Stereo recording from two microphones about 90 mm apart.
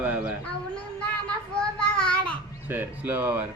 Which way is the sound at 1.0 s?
10° left (ahead or behind).